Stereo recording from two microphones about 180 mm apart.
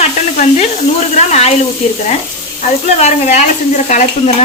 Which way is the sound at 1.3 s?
40° left (ahead or behind).